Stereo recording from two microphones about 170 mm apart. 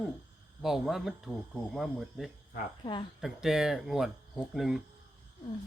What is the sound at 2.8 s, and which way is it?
Speech, 30° left (ahead or behind).